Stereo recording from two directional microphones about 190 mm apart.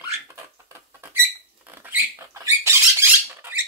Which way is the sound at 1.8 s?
15° right (ahead or behind).